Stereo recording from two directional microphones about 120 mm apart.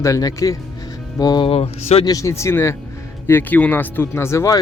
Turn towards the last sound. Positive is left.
turn(degrees=25)  # may be behind; listen again after turning